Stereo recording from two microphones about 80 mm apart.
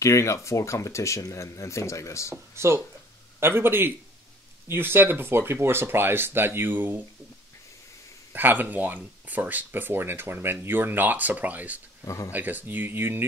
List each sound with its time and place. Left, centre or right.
0.0 s speech: left
2.5 s speech: right
8.3 s speech: right
12.0 s speech: left
12.3 s speech: right